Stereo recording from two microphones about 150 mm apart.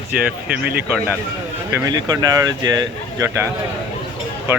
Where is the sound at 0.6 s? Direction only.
10° right (ahead or behind).